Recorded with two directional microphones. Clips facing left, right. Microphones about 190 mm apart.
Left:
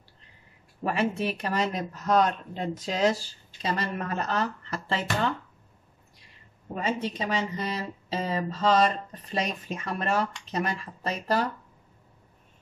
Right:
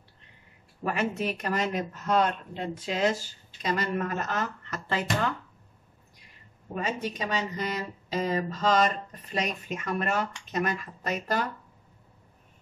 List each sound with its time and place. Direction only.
0.8 s a woman's voice: 30° left (ahead or behind)
6.7 s a woman's voice: 30° left (ahead or behind)